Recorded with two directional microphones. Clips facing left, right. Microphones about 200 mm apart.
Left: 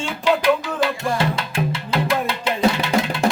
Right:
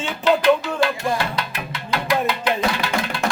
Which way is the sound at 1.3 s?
25° left (ahead or behind).